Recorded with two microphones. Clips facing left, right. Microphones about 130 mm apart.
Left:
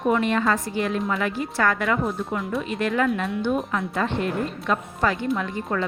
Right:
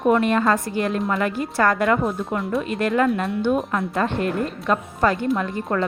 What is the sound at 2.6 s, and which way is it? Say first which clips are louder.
Speech: right 3 dB; 45° right (ahead or behind).